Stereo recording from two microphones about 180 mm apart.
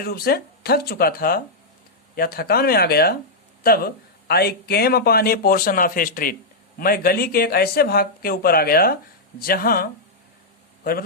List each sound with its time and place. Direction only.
0.0 s speech: 60° left (ahead or behind)